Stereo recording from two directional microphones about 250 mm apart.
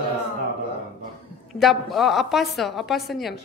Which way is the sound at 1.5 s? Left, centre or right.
Centre.